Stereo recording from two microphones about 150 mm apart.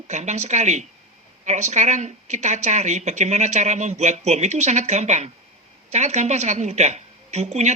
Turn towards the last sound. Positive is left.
turn(degrees=-50)  # may be behind; listen again after turning